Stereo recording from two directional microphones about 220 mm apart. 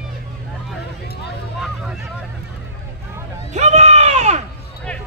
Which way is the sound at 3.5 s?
30° right (ahead or behind).